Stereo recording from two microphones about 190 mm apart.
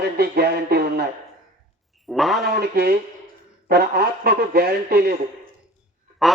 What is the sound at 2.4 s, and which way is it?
A man's voice, 55° right (ahead or behind).